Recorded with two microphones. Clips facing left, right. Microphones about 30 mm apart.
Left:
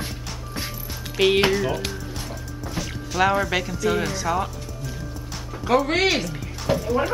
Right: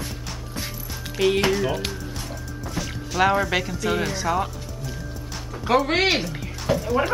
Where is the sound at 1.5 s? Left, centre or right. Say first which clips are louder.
Even; centre.